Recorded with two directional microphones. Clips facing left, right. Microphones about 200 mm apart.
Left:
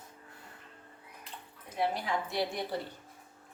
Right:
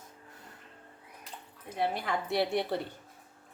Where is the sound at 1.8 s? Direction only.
60° right (ahead or behind).